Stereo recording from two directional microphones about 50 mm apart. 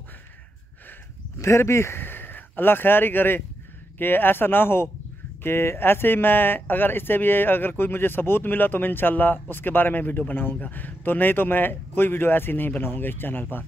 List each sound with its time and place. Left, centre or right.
1.4 s speech: left
2.0 s speech: left